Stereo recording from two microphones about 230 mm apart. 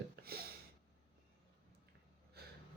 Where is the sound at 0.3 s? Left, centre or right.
Right.